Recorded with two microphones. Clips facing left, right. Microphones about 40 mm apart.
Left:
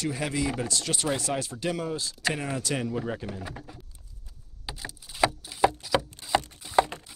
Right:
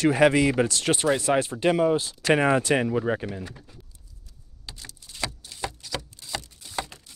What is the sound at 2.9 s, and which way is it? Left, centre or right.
Speech, right.